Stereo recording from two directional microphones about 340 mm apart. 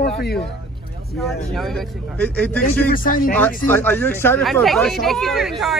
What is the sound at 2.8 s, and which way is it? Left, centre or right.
Speech, left.